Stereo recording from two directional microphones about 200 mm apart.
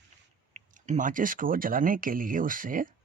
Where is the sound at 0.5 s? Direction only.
40° right (ahead or behind).